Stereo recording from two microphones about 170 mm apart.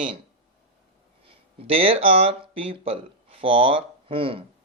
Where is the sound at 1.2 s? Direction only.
35° right (ahead or behind).